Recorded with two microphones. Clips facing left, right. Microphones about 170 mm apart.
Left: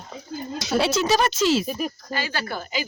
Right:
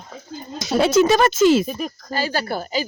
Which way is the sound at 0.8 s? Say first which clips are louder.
Right 6 dB; 50° right (ahead or behind).